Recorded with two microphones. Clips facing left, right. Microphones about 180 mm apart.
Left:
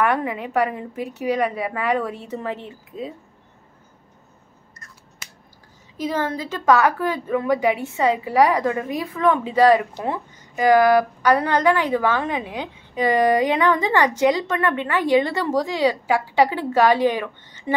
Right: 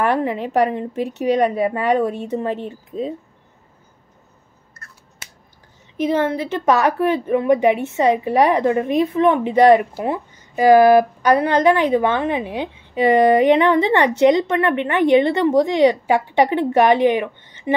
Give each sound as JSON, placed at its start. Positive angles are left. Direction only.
{"t": 0.0, "sound": "a woman's voice", "side_deg": -30}
{"t": 6.0, "sound": "a woman's voice", "side_deg": -25}